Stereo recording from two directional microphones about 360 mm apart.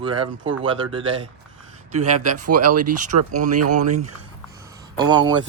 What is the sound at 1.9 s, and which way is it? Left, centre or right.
Speech, right.